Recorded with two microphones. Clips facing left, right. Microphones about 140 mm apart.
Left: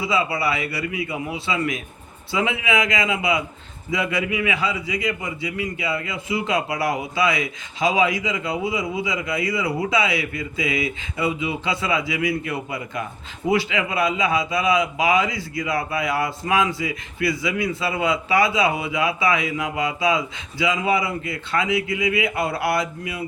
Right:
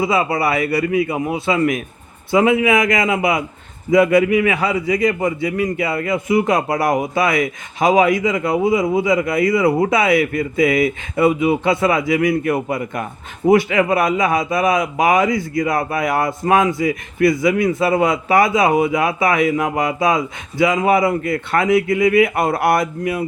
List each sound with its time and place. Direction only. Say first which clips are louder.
0.0 s a man's voice: right 5 dB; 50° right (ahead or behind)